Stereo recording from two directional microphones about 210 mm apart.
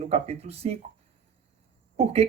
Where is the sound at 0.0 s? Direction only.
30° right (ahead or behind).